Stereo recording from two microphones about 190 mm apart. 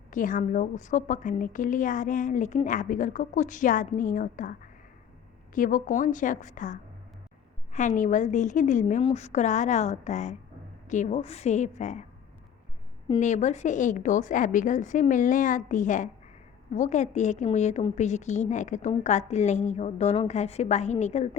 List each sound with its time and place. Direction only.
0.1 s a woman's voice: 45° left (ahead or behind)
5.5 s a woman's voice: 45° left (ahead or behind)
13.1 s a woman's voice: 40° left (ahead or behind)